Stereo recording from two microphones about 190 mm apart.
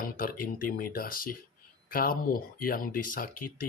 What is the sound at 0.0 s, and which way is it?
Speech, 50° left (ahead or behind).